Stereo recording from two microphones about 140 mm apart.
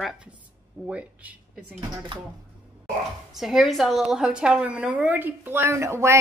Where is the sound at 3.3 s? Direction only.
Centre (ahead or behind).